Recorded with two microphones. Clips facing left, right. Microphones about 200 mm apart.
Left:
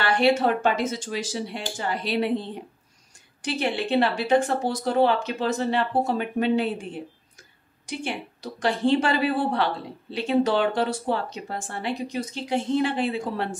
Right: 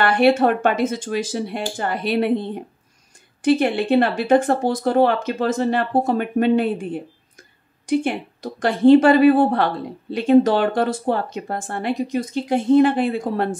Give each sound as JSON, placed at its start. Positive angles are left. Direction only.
{"t": 0.0, "sound": "speech", "side_deg": -55}